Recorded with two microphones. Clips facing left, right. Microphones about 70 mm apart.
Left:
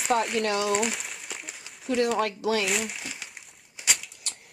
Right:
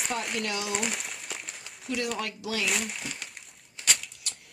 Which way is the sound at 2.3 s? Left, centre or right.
Left.